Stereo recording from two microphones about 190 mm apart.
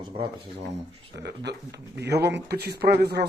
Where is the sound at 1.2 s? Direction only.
65° right (ahead or behind).